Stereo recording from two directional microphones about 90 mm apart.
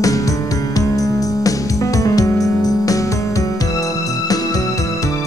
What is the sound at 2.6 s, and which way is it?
Music, 40° left (ahead or behind).